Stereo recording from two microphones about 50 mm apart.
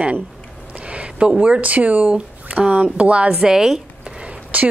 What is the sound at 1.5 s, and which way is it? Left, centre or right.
Speech, right.